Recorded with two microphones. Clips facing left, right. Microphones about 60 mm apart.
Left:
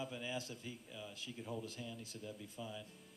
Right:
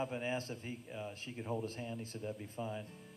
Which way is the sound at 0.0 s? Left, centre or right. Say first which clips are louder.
Right 6 dB; right.